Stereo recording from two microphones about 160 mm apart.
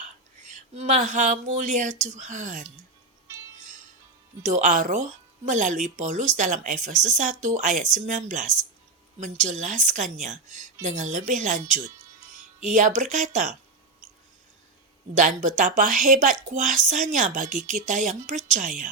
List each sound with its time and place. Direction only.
0.4 s speech: 45° right (ahead or behind)
4.4 s speech: 50° right (ahead or behind)
15.1 s speech: 50° right (ahead or behind)